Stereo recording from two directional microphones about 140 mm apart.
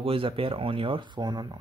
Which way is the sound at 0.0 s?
40° right (ahead or behind).